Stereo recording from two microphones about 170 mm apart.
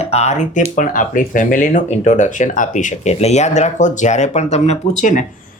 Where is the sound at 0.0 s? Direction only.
40° left (ahead or behind).